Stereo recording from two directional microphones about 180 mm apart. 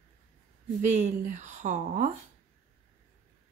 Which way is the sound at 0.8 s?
40° right (ahead or behind).